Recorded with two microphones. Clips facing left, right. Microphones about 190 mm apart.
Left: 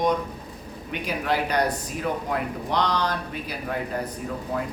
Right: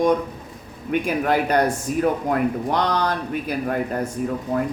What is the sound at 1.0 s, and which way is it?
Speech, 50° right (ahead or behind).